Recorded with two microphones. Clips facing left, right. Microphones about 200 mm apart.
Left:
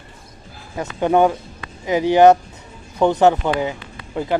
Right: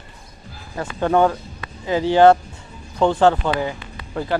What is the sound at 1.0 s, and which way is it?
Speech, 15° left (ahead or behind).